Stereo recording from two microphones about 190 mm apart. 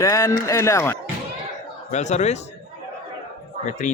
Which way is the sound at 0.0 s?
15° left (ahead or behind).